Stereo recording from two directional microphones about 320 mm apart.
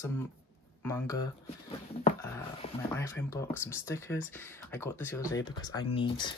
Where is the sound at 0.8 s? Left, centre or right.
Centre.